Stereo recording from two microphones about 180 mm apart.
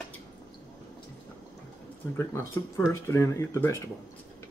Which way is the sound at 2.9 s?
15° left (ahead or behind).